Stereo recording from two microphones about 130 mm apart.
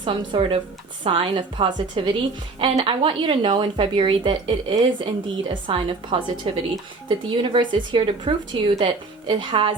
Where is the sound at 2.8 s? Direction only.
40° right (ahead or behind).